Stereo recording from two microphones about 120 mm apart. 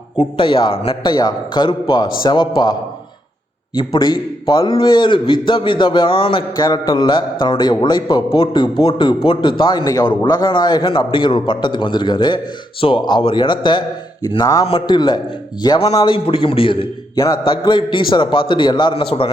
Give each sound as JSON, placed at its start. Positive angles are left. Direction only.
{"t": 0.2, "sound": "a man's voice", "side_deg": 45}
{"t": 3.8, "sound": "a man's voice", "side_deg": 40}
{"t": 6.7, "sound": "a man's voice", "side_deg": 35}
{"t": 8.4, "sound": "a man's voice", "side_deg": 45}
{"t": 10.5, "sound": "a man's voice", "side_deg": 35}
{"t": 14.7, "sound": "a man's voice", "side_deg": 40}
{"t": 17.2, "sound": "speech", "side_deg": 25}
{"t": 17.4, "sound": "a man's voice", "side_deg": 40}